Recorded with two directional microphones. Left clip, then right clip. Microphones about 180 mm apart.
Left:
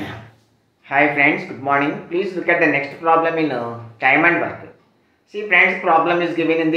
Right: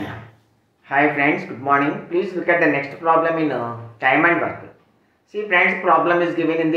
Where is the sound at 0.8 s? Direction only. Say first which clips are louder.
Left 2 dB; 5° left (ahead or behind).